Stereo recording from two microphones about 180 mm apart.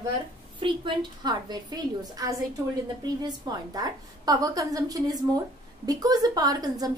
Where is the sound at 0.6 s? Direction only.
30° right (ahead or behind).